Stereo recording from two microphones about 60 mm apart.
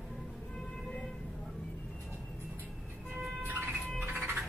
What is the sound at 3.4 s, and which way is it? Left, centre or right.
Siren, right.